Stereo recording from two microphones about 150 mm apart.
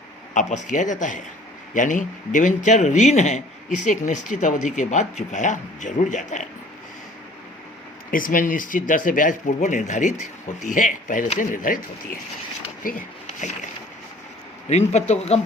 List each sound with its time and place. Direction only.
0.3 s a man's voice: 55° left (ahead or behind)
8.1 s a man's voice: 65° left (ahead or behind)
14.7 s speech: 45° left (ahead or behind)